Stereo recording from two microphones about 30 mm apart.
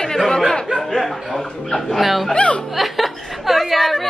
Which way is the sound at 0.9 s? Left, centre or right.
Centre.